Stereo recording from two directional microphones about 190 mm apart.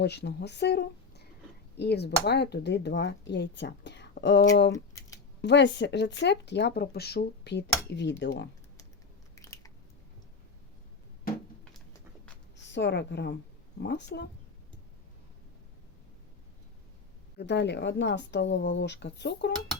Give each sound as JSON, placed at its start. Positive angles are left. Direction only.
{"t": 0.0, "sound": "speech", "side_deg": 60}
{"t": 9.3, "sound": "biting", "side_deg": 15}
{"t": 12.6, "sound": "a woman's voice", "side_deg": 65}
{"t": 17.3, "sound": "speech", "side_deg": 65}